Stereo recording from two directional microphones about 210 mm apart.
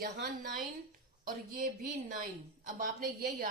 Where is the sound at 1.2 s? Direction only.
40° right (ahead or behind).